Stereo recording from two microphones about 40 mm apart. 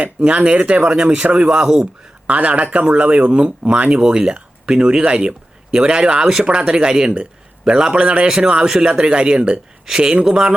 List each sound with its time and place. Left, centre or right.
0.3 s speech: right
1.5 s speech: centre
2.2 s speech: right; by 10.5 s centre